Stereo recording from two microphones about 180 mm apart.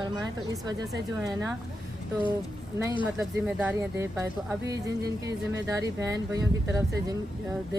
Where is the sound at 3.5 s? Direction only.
10° right (ahead or behind).